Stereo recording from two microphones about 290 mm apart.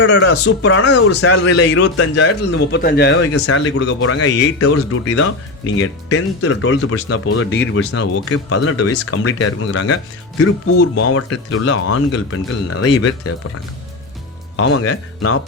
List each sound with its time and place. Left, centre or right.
0.0 s speech: left
1.1 s a man's voice: left
7.9 s speech: left
14.5 s speech: left